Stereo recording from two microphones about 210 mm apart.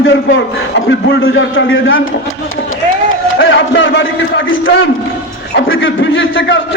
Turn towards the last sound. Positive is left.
turn(degrees=65)  # may be behind; listen again after turning